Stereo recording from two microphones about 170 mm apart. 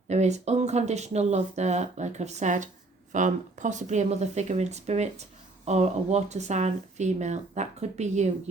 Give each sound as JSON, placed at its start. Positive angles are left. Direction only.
{"t": 0.1, "sound": "speech", "side_deg": -40}